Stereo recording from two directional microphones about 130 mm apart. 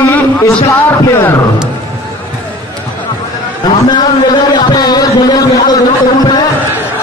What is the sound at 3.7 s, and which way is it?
A man's voice, 35° left (ahead or behind).